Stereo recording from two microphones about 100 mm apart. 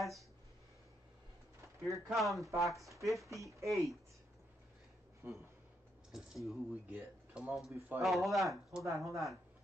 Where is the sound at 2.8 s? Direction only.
30° right (ahead or behind).